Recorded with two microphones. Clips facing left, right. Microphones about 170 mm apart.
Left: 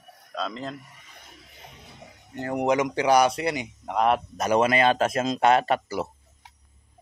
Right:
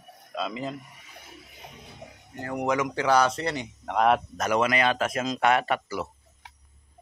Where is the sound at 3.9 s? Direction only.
Centre (ahead or behind).